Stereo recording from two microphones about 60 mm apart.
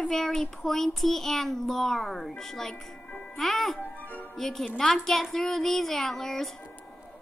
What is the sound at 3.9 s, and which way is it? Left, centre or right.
Music, left.